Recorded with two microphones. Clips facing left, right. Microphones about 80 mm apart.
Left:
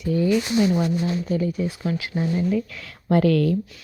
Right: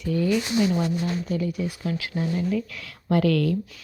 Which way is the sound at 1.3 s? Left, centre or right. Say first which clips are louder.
Left 3 dB; left.